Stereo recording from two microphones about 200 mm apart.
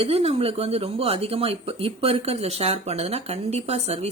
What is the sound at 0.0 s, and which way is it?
Speech, 30° right (ahead or behind).